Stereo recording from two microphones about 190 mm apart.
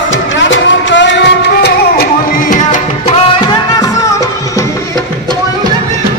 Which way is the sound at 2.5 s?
40° left (ahead or behind).